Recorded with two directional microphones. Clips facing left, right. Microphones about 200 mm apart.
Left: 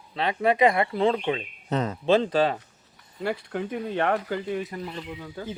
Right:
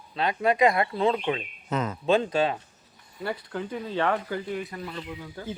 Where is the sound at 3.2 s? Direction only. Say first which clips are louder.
Left 3 dB; 60° left (ahead or behind).